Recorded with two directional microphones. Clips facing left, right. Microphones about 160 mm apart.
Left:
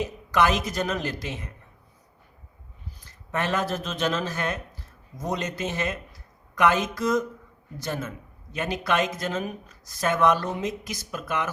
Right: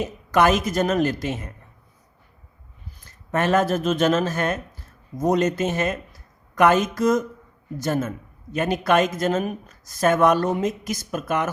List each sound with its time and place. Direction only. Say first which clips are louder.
0.0 s a woman's voice: right 4 dB; 50° right (ahead or behind)
3.0 s a woman's voice: right 5 dB; 50° right (ahead or behind)